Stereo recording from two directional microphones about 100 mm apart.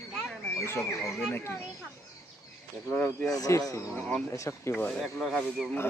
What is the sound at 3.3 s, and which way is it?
Speech, 35° left (ahead or behind).